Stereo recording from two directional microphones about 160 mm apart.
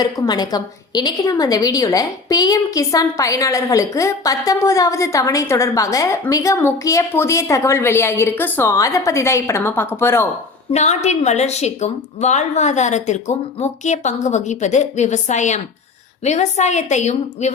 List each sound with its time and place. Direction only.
0.0 s a woman's voice: 25° left (ahead or behind)
10.7 s speech: 45° left (ahead or behind)